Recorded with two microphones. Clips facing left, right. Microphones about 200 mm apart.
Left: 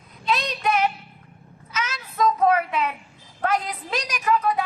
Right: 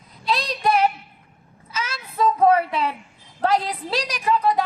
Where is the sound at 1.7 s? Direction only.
30° right (ahead or behind).